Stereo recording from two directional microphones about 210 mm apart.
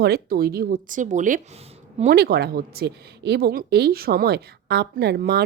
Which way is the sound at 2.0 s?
50° right (ahead or behind).